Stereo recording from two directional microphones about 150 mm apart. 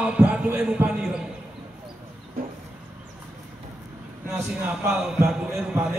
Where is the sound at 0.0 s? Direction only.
10° right (ahead or behind).